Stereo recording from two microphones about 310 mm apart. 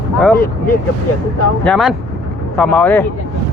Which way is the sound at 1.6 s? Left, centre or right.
Centre.